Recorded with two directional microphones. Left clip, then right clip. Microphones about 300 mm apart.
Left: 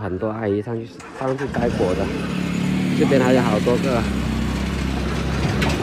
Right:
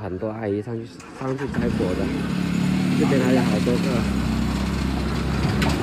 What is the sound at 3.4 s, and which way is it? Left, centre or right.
Vehicle, right.